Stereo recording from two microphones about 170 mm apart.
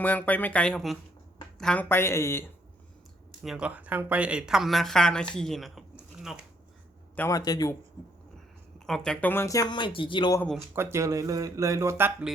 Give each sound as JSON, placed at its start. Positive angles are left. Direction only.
{"t": 0.0, "sound": "speech", "side_deg": 10}
{"t": 3.4, "sound": "speech", "side_deg": -5}
{"t": 7.2, "sound": "speech", "side_deg": 20}
{"t": 8.9, "sound": "speech", "side_deg": 5}
{"t": 10.8, "sound": "speech", "side_deg": -15}